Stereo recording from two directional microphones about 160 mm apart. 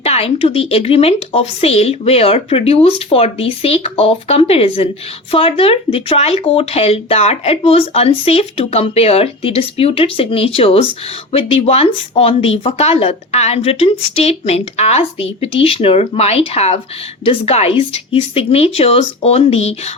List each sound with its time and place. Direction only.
0.0 s speech: 40° left (ahead or behind)